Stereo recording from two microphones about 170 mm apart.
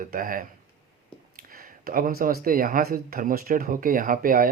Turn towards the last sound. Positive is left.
turn(degrees=-55)  # may be behind; listen again after turning